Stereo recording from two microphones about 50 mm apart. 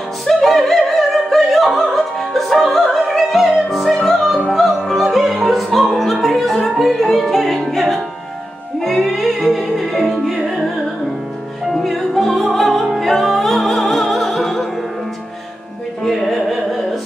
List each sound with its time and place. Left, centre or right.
0.4 s opera: centre
2.3 s music: centre
4.5 s opera: centre
6.8 s music: centre
11.7 s music: centre
16.0 s music: centre